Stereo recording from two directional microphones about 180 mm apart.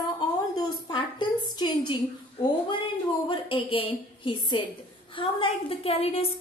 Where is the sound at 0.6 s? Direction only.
25° left (ahead or behind).